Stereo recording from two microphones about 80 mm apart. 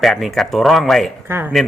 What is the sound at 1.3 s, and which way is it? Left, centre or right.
Speech, right.